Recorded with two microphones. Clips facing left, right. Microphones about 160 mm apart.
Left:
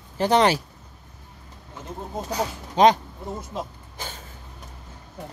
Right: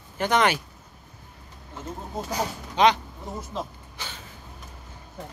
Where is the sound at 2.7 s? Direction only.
45° left (ahead or behind).